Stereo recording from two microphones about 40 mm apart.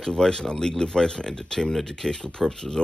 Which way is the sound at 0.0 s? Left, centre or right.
Centre.